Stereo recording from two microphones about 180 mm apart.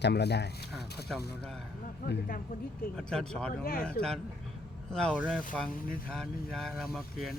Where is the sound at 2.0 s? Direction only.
55° left (ahead or behind).